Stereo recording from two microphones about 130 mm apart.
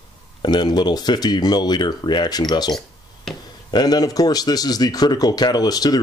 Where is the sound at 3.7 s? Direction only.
30° left (ahead or behind).